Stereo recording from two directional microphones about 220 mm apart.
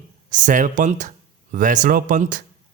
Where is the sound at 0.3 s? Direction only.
35° right (ahead or behind).